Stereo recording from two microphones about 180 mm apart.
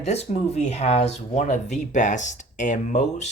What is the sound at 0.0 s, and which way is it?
Speech, 35° left (ahead or behind).